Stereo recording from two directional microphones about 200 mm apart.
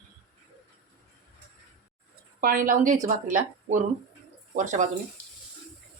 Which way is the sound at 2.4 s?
45° right (ahead or behind).